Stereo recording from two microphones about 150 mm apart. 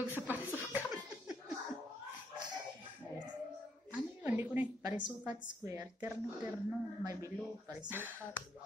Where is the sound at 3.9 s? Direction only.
10° right (ahead or behind).